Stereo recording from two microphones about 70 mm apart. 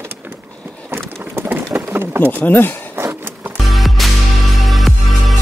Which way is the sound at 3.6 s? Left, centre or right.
Centre.